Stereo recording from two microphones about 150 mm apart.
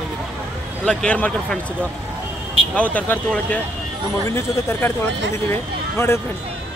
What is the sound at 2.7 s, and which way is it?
Speech, 10° left (ahead or behind).